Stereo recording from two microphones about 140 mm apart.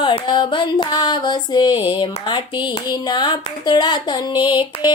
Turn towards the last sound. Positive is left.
turn(degrees=35)  # may be behind; listen again after turning